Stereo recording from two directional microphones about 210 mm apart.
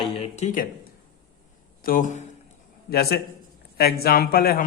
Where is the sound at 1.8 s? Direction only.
40° left (ahead or behind).